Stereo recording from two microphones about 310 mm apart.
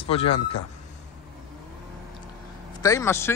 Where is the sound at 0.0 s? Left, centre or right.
Centre.